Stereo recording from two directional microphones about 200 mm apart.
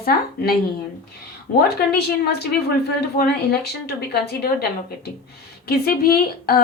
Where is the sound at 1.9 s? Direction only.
55° left (ahead or behind).